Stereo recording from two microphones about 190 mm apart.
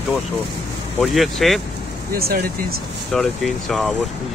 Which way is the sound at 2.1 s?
55° right (ahead or behind).